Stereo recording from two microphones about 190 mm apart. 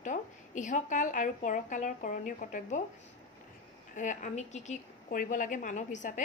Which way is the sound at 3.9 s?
40° left (ahead or behind).